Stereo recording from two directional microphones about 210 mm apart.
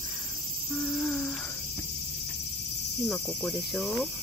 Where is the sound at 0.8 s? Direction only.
5° left (ahead or behind).